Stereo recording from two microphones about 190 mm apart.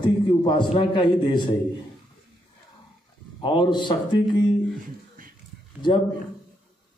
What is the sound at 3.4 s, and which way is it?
Speech, 25° left (ahead or behind).